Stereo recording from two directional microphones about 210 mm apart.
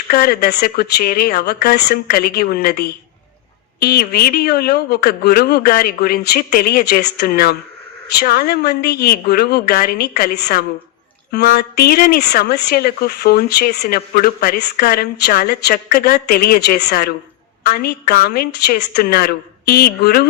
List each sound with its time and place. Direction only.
0.1 s speech: 45° left (ahead or behind)